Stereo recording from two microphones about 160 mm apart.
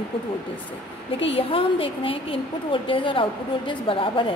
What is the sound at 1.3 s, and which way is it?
A woman's voice, 35° left (ahead or behind).